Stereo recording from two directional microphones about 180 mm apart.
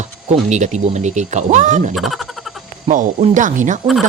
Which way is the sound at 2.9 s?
45° right (ahead or behind).